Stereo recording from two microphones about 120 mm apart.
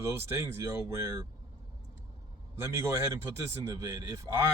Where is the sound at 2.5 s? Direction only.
20° right (ahead or behind).